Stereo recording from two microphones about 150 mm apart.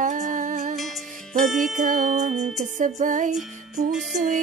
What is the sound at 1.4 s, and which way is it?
Speech, centre (ahead or behind).